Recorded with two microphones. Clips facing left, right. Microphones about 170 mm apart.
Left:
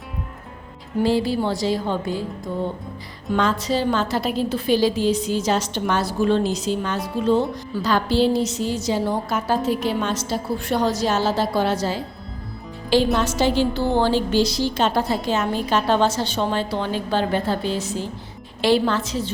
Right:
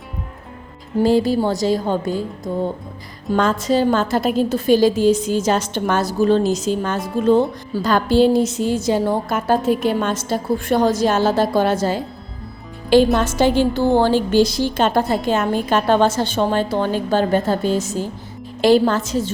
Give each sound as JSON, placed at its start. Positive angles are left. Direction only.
{"t": 1.0, "sound": "a woman's voice", "side_deg": -45}
{"t": 13.1, "sound": "a woman's voice", "side_deg": -50}